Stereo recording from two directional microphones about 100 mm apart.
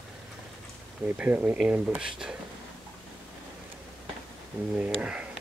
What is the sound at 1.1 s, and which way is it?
Speech, 15° right (ahead or behind).